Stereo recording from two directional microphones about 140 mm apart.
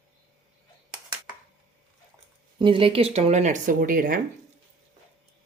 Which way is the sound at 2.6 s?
40° right (ahead or behind).